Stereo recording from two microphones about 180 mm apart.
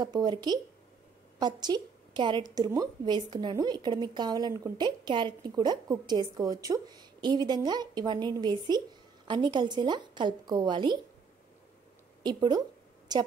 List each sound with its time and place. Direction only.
0.0 s a woman's voice: 25° right (ahead or behind)
12.2 s a woman's voice: 25° right (ahead or behind)